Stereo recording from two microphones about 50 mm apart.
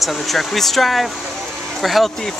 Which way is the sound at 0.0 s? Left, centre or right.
Centre.